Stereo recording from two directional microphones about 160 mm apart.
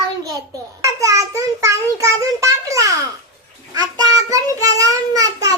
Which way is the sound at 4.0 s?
20° right (ahead or behind).